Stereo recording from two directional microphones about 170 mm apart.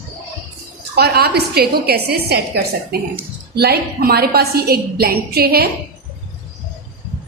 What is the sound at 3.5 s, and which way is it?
A woman's voice, 70° right (ahead or behind).